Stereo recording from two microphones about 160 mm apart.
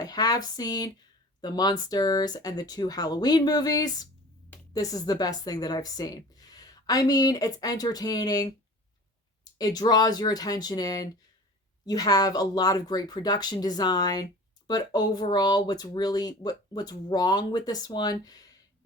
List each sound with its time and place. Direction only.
0.0 s speech: 25° left (ahead or behind)